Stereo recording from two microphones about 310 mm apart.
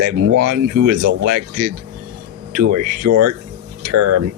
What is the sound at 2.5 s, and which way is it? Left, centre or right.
Speech, right.